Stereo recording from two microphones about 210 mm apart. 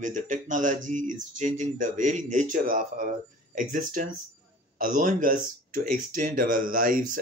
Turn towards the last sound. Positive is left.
turn(degrees=-40)  # may be behind; listen again after turning